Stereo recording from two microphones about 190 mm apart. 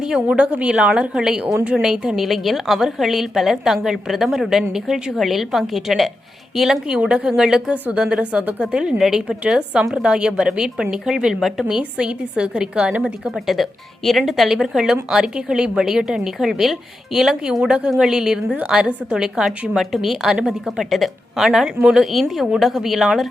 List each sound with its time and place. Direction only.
0.0 s a woman's voice: 5° right (ahead or behind)